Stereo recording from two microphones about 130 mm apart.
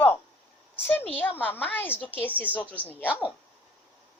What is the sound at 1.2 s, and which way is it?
A child's voice, 15° left (ahead or behind).